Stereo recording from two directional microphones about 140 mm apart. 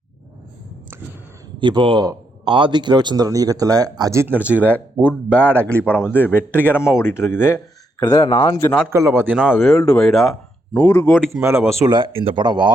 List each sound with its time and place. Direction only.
1.5 s a man's voice: 35° right (ahead or behind); by 5.6 s 10° right (ahead or behind)
5.8 s a man's voice: 15° left (ahead or behind)
8.9 s speech: 20° right (ahead or behind); by 10.3 s centre (ahead or behind)
10.8 s a man's voice: 10° left (ahead or behind)
11.9 s speech: 35° right (ahead or behind)